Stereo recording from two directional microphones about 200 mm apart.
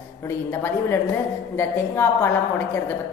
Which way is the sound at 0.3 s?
10° left (ahead or behind).